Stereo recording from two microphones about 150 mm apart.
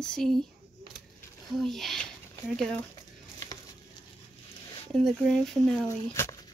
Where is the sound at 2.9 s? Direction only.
25° left (ahead or behind).